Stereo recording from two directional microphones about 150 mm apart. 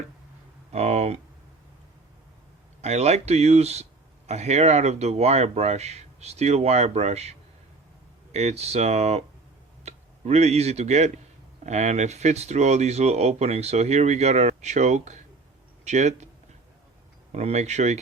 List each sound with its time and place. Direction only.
0.7 s speech: 45° right (ahead or behind)
2.8 s speech: 45° right (ahead or behind)
17.3 s speech: 45° right (ahead or behind)